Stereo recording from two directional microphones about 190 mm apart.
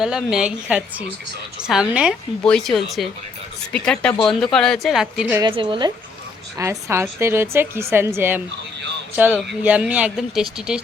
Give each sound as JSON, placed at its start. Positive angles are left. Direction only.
{"t": 0.0, "sound": "a woman's voice", "side_deg": -5}
{"t": 5.4, "sound": "a woman's voice", "side_deg": -25}
{"t": 6.6, "sound": "a woman's voice", "side_deg": -15}